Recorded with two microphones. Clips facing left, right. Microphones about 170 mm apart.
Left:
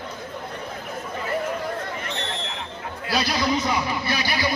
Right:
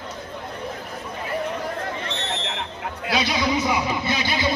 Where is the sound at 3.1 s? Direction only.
Centre (ahead or behind); by 4.5 s 20° right (ahead or behind).